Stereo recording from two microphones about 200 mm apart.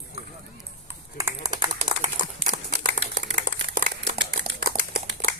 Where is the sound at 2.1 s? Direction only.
40° right (ahead or behind).